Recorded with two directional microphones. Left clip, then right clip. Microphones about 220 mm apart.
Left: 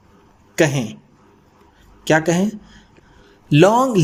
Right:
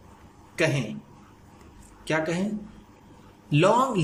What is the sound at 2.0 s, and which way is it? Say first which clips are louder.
Speech: left 10 dB; 30° left (ahead or behind).